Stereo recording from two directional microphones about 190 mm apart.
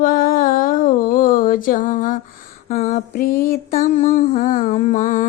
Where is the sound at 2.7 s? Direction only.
35° left (ahead or behind).